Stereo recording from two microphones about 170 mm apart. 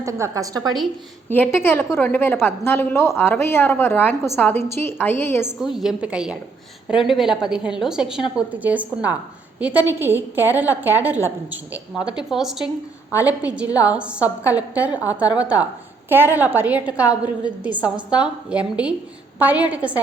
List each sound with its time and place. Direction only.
0.0 s a woman's voice: 20° right (ahead or behind)
1.3 s a woman's voice: 10° left (ahead or behind)
5.7 s a woman's voice: 5° right (ahead or behind)
18.1 s a woman's voice: 5° right (ahead or behind)